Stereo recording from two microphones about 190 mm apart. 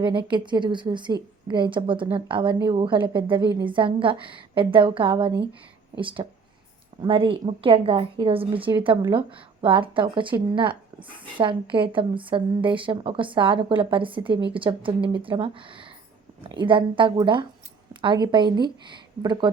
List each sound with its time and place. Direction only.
0.0 s speech: 25° right (ahead or behind)